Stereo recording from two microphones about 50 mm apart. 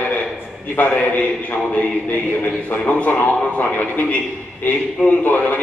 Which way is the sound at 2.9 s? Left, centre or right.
Left.